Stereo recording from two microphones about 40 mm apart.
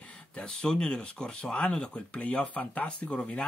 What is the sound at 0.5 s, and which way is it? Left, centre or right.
Speech, centre.